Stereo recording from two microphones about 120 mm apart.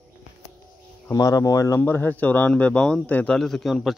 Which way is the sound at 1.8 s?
15° left (ahead or behind).